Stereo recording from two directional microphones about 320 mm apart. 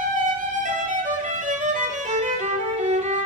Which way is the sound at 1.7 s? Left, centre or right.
Right.